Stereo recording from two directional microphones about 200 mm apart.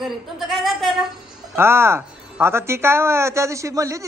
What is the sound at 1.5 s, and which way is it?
Speech, 10° right (ahead or behind).